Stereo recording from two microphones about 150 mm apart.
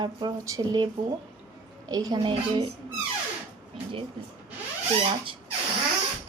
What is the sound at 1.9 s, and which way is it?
Speech, 25° right (ahead or behind).